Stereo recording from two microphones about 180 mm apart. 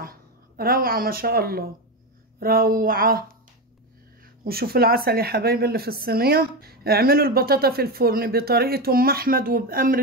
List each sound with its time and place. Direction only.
0.0 s speech: 55° right (ahead or behind)
4.5 s speech: 55° right (ahead or behind)